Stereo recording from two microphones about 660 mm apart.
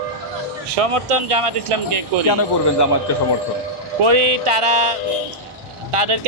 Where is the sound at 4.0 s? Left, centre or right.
Right.